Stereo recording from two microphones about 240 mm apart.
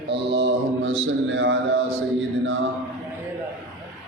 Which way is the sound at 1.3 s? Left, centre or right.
Right.